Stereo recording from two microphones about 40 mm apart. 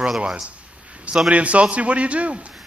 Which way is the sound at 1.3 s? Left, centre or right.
Right.